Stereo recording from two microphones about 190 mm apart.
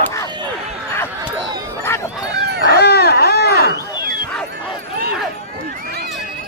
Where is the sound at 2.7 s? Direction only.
60° left (ahead or behind).